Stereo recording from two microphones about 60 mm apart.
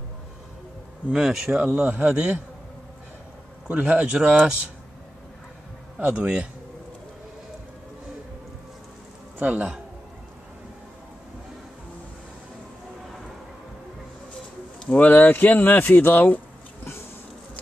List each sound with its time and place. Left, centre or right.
1.1 s speech: centre
3.6 s speech: centre
5.9 s speech: right
9.4 s speech: right
14.9 s speech: left